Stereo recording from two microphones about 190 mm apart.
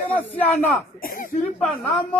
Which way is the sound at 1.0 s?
45° left (ahead or behind).